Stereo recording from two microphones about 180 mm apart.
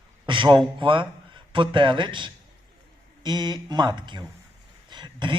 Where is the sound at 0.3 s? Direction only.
25° right (ahead or behind).